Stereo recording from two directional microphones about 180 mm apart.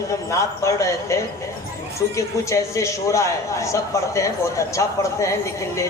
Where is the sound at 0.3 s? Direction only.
15° left (ahead or behind).